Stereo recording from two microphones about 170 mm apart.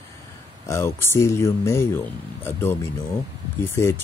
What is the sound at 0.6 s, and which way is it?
Speech, 15° left (ahead or behind).